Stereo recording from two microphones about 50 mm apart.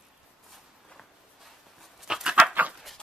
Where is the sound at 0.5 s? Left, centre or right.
Centre.